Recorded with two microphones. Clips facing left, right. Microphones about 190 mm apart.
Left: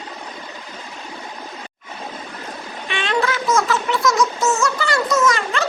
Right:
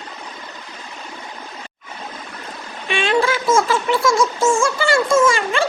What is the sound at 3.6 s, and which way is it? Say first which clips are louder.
A child's voice: right 2 dB; 30° right (ahead or behind).